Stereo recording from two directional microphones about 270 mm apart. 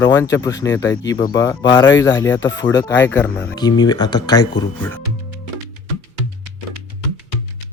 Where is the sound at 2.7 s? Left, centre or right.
Left.